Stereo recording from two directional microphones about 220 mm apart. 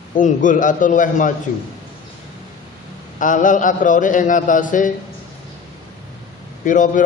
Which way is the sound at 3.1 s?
35° left (ahead or behind).